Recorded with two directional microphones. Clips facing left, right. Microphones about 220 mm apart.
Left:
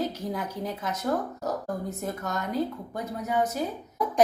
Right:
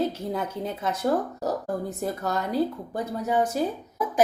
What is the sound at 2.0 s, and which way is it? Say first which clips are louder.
A woman's voice: right 4 dB; 30° right (ahead or behind).